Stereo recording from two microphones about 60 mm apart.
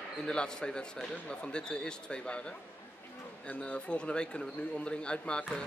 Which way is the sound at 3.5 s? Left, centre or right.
Centre.